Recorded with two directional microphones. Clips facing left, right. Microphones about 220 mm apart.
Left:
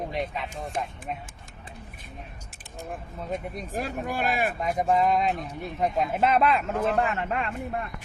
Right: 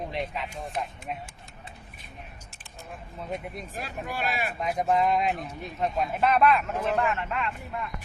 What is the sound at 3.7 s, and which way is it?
Speech, 50° left (ahead or behind).